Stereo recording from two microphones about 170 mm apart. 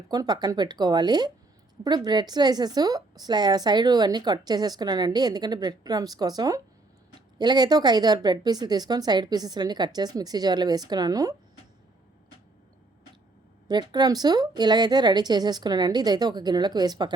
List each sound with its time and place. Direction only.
0.1 s a woman's voice: 25° right (ahead or behind)
13.7 s a woman's voice: 25° right (ahead or behind)